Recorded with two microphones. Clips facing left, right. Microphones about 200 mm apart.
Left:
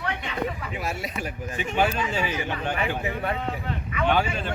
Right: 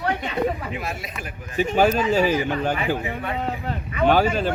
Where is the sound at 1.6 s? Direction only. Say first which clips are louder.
Right 6 dB; 40° right (ahead or behind).